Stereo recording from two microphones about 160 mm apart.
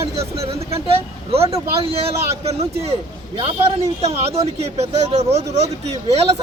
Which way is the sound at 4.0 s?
40° right (ahead or behind).